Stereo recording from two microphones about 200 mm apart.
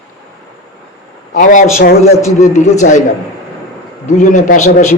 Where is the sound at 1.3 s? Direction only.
40° left (ahead or behind).